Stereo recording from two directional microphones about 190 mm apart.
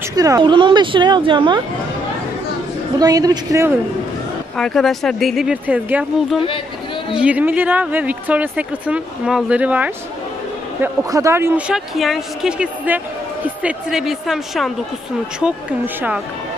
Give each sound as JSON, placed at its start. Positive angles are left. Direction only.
{"t": 0.1, "sound": "a woman's voice", "side_deg": -20}
{"t": 3.0, "sound": "a woman's voice", "side_deg": -20}
{"t": 4.6, "sound": "speech", "side_deg": 0}